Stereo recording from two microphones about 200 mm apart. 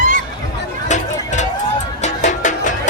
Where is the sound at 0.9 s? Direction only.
35° left (ahead or behind).